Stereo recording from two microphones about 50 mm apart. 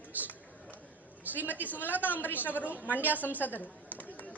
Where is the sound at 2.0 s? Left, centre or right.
Left.